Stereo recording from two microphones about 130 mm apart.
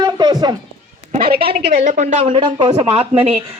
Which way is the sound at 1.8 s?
65° right (ahead or behind).